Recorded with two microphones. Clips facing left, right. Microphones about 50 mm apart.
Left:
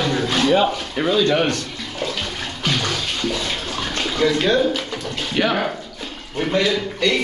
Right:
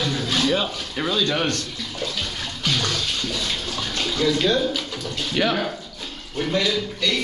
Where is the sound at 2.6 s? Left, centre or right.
Centre.